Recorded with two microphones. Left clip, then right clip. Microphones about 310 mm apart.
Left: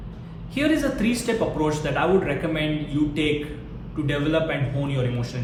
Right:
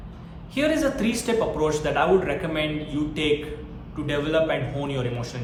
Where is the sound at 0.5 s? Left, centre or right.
Centre.